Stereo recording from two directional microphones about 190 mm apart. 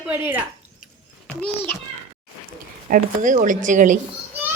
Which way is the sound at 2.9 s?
45° right (ahead or behind).